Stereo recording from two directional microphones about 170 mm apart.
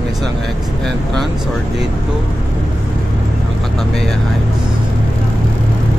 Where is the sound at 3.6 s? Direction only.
Centre (ahead or behind).